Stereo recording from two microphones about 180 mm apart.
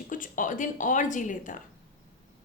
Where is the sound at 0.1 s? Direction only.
45° left (ahead or behind).